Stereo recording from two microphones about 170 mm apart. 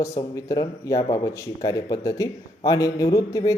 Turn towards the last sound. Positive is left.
turn(degrees=20)  # may be behind; listen again after turning